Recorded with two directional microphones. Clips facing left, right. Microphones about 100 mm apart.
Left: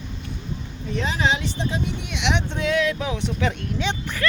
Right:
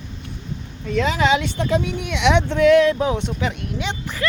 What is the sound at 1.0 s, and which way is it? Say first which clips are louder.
Speech: right 5 dB; 90° right.